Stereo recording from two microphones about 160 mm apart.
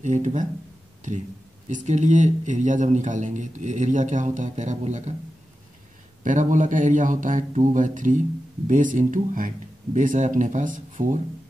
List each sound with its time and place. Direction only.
0.0 s speech: 50° right (ahead or behind)
1.7 s speech: 50° right (ahead or behind)
6.2 s speech: 55° right (ahead or behind)